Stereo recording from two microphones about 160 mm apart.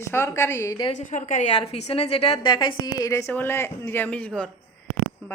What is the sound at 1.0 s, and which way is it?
A woman's voice, 50° left (ahead or behind).